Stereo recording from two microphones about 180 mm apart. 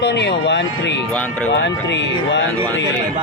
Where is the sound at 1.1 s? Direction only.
10° left (ahead or behind).